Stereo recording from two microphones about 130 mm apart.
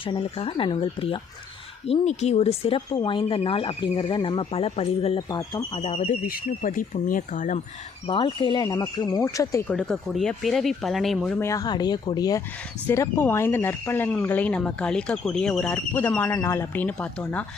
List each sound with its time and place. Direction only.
0.0 s speech: 45° left (ahead or behind)
1.9 s speech: 55° left (ahead or behind)
5.3 s speech: 30° left (ahead or behind)
5.7 s speech: 50° left (ahead or behind)
6.1 s speech: 90° left
8.0 s speech: 40° left (ahead or behind)
8.6 s speech: 30° left (ahead or behind)
9.6 s speech: 5° left (ahead or behind)
11.3 s speech: 25° left (ahead or behind)
12.9 s speech: 20° left (ahead or behind)